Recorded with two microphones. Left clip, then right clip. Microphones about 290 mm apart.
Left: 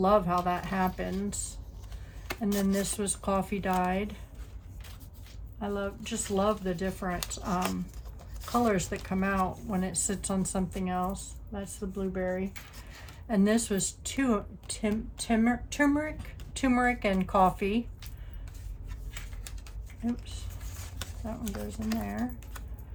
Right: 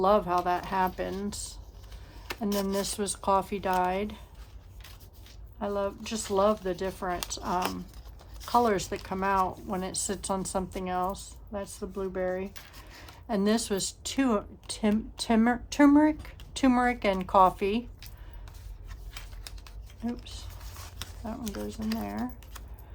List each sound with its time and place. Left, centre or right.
0.0 s speech: centre
2.4 s speech: centre
5.5 s speech: centre
21.0 s speech: centre